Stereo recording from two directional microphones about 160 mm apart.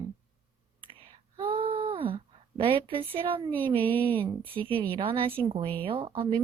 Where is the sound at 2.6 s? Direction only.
35° right (ahead or behind).